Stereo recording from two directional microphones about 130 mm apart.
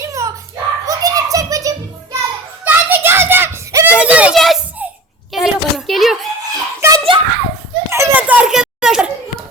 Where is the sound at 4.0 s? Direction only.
10° right (ahead or behind).